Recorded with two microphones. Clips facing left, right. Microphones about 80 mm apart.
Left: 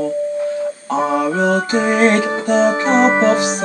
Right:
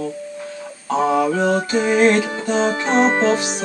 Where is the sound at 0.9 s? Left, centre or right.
Left.